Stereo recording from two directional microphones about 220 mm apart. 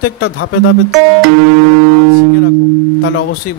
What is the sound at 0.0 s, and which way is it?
Speech, 70° left (ahead or behind).